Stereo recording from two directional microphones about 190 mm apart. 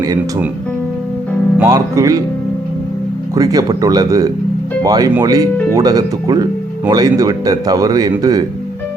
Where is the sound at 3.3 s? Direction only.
20° right (ahead or behind).